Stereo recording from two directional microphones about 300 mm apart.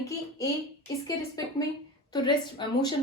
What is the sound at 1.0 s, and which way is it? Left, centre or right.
A woman's voice, centre.